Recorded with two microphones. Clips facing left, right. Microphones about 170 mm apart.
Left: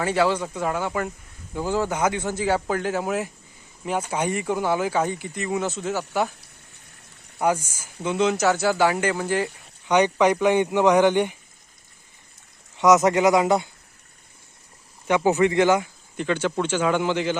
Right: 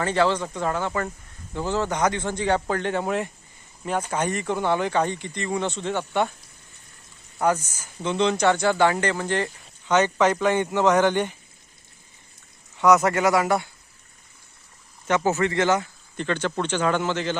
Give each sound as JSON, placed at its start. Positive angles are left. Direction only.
{"t": 0.0, "sound": "speech", "side_deg": 10}
{"t": 7.3, "sound": "speech", "side_deg": 10}
{"t": 12.7, "sound": "speech", "side_deg": 20}
{"t": 15.0, "sound": "speech", "side_deg": 15}